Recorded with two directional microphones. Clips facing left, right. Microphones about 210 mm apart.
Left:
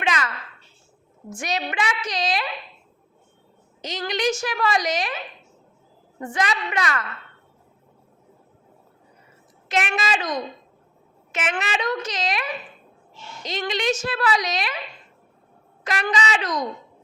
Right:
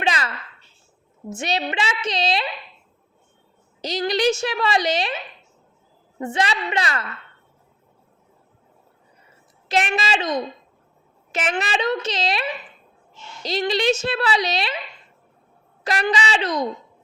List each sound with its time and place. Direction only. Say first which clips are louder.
0.0 s a sound: right 1 dB; 30° right (ahead or behind)
1.3 s a woman's voice: right 3 dB; 25° right (ahead or behind)
3.8 s a woman's voice: right 5 dB; 35° right (ahead or behind)
9.6 s a woman's voice: right 2 dB; 30° right (ahead or behind)
11.3 s a woman's voice: right 2 dB; 35° right (ahead or behind)
15.8 s a woman's voice: right 2 dB; 35° right (ahead or behind)